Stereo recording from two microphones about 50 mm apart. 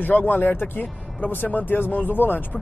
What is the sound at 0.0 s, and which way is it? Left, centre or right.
Speech, left.